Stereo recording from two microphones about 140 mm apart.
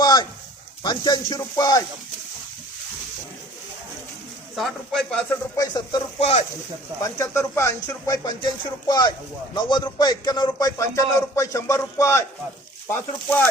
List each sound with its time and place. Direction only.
0.0 s a sound: 30° left (ahead or behind)
0.8 s speech: 30° left (ahead or behind)
4.5 s a man's voice: centre (ahead or behind)
5.5 s speech: 25° left (ahead or behind)
6.1 s speech: 45° left (ahead or behind)
7.0 s speech: 20° left (ahead or behind)